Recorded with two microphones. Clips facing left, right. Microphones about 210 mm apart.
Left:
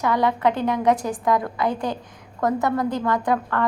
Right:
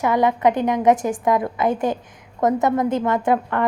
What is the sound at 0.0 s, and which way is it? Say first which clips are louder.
A woman's voice: right 3 dB; 20° right (ahead or behind).